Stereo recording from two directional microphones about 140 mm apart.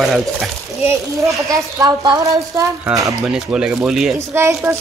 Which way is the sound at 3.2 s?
5° right (ahead or behind).